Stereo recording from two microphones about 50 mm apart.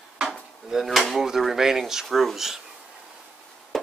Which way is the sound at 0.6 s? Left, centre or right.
Centre.